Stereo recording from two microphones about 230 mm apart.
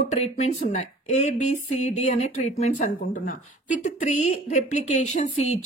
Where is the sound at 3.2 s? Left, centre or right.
Left.